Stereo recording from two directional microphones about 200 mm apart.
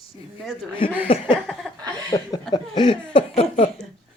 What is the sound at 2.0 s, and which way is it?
Speech, 20° left (ahead or behind).